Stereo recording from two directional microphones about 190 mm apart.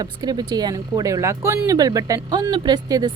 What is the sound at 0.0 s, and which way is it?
Speech, 20° right (ahead or behind).